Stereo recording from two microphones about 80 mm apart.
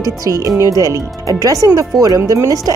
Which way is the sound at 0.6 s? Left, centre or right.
Right.